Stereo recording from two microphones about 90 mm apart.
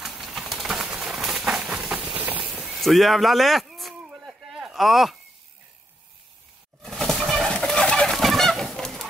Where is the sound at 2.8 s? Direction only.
Centre (ahead or behind).